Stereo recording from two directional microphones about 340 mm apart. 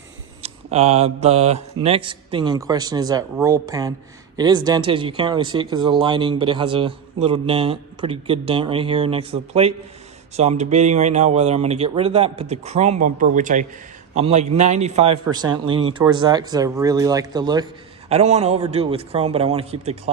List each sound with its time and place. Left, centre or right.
0.4 s speech: centre